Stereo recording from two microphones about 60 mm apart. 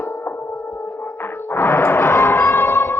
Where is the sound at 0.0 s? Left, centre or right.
Left.